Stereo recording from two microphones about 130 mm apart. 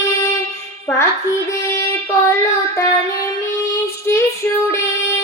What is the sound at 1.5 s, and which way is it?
Child singing, 20° left (ahead or behind).